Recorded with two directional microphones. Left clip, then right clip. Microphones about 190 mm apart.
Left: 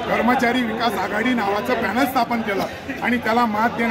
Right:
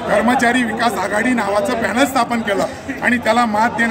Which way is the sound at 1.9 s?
10° right (ahead or behind).